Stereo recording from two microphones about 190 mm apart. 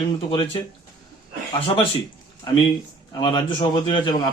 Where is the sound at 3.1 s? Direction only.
20° left (ahead or behind).